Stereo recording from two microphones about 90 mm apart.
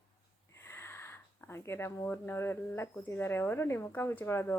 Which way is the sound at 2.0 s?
25° left (ahead or behind).